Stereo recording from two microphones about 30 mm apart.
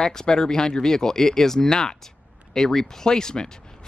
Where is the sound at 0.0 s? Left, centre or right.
Centre.